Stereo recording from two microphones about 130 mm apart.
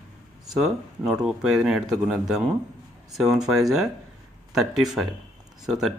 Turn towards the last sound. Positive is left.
turn(degrees=-5)  # may be behind; listen again after turning